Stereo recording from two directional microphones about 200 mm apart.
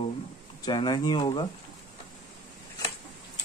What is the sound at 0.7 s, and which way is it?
Speech, 20° left (ahead or behind).